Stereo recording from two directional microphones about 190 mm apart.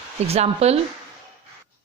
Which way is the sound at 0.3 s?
35° right (ahead or behind).